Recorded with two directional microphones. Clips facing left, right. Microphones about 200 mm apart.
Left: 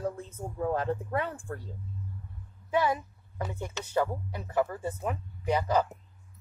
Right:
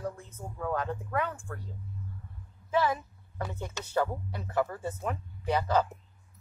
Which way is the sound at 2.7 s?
15° left (ahead or behind).